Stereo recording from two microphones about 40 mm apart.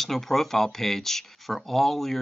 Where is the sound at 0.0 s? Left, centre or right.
Centre.